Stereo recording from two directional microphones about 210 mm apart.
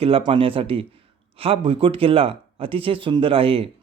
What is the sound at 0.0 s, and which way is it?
Speech, 25° right (ahead or behind).